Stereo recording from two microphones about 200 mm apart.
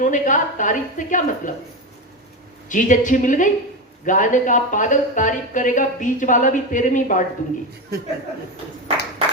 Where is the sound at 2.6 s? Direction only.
40° left (ahead or behind).